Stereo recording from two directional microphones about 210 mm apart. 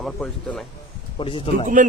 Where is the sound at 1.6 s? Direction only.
40° right (ahead or behind).